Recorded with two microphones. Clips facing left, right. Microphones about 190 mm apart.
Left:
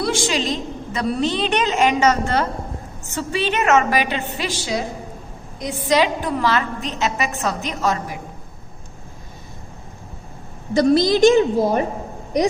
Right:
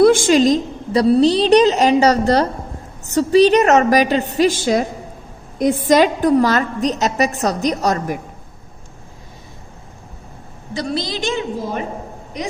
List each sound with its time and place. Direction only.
0.0 s a woman's voice: 50° right (ahead or behind)
10.8 s a woman's voice: 45° left (ahead or behind)